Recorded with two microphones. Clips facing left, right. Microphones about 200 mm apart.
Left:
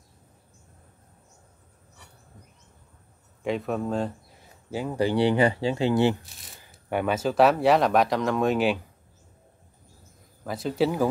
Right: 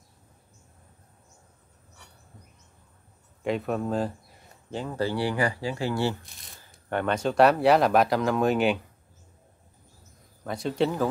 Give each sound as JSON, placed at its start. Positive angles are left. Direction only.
{"t": 3.4, "sound": "speech", "side_deg": 0}
{"t": 4.6, "sound": "speech", "side_deg": 10}
{"t": 6.7, "sound": "speech", "side_deg": 10}
{"t": 10.4, "sound": "speech", "side_deg": 0}